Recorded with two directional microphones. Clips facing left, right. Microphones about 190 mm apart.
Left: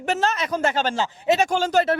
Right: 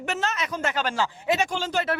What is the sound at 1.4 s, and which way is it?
Speech, 45° left (ahead or behind).